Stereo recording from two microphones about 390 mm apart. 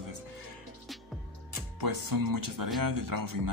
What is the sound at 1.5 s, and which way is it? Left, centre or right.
Speech, right.